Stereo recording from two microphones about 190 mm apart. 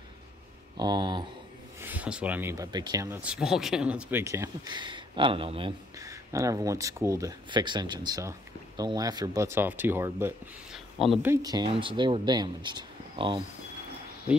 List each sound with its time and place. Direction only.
0.7 s speech: 20° right (ahead or behind)
1.8 s speech: 10° right (ahead or behind)
3.2 s speech: 5° right (ahead or behind); by 13.4 s 25° right (ahead or behind)